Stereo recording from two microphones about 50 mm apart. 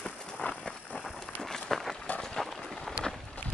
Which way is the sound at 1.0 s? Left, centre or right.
Centre.